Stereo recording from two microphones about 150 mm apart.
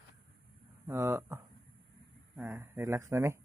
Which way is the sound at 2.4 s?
15° right (ahead or behind).